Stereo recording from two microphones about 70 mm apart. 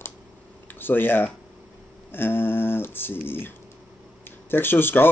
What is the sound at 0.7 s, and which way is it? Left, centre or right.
Speech, left.